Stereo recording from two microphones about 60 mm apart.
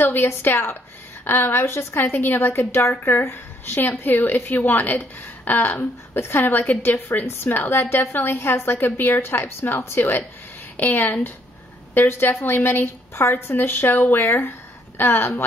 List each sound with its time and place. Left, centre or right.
0.0 s a woman's voice: left